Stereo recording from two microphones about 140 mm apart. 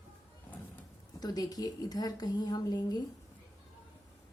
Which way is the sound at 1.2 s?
25° left (ahead or behind).